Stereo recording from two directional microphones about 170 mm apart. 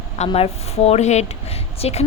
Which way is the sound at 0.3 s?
35° left (ahead or behind).